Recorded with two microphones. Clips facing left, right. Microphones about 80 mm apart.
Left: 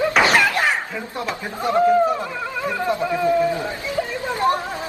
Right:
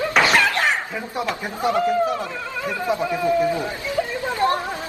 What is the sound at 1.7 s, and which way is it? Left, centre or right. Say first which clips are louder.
Speech: left 5 dB; left.